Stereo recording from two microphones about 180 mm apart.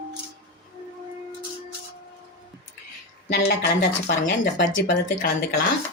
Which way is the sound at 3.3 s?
65° left (ahead or behind).